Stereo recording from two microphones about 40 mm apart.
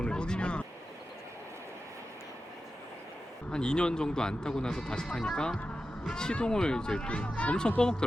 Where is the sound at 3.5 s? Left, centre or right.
Left.